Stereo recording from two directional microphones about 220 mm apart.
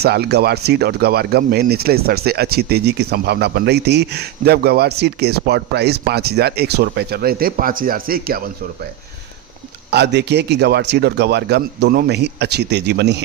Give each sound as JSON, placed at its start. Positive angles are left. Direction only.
{"t": 0.0, "sound": "speech", "side_deg": -45}
{"t": 9.9, "sound": "speech", "side_deg": -50}